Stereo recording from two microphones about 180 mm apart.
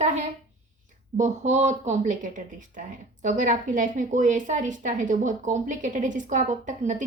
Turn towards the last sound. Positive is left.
turn(degrees=-45)  # may be behind; listen again after turning